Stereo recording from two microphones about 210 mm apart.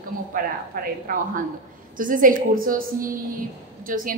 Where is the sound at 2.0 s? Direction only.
40° right (ahead or behind).